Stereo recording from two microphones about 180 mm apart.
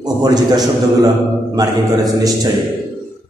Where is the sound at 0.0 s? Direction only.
20° right (ahead or behind).